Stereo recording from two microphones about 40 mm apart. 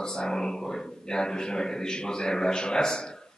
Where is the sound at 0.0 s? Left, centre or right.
Centre.